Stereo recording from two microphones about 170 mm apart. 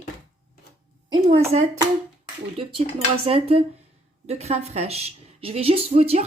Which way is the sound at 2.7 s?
35° right (ahead or behind).